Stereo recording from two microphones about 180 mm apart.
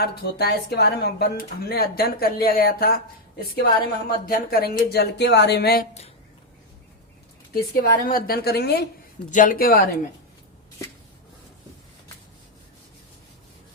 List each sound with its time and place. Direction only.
0.0 s speech: 60° left (ahead or behind)
7.5 s speech: 55° left (ahead or behind)
9.3 s speech: 50° left (ahead or behind)